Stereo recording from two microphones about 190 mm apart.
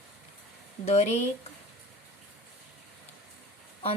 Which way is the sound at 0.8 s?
35° left (ahead or behind).